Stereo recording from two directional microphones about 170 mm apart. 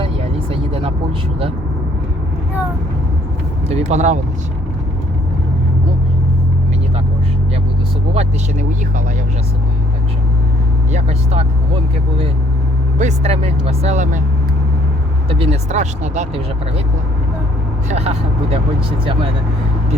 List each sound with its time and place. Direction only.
0.5 s vehicle: 35° right (ahead or behind)
3.7 s speech: 45° right (ahead or behind)
8.1 s speech: 40° right (ahead or behind)
10.9 s speech: 40° right (ahead or behind)
13.0 s speech: 40° right (ahead or behind)
15.3 s speech: 35° right (ahead or behind)
17.8 s speech: 40° right (ahead or behind)